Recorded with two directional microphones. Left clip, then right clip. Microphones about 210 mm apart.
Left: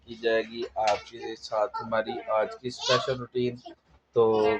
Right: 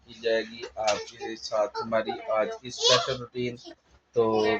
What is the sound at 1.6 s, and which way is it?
Speech, 5° left (ahead or behind).